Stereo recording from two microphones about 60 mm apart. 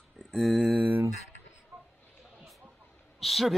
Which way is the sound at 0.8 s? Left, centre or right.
Right.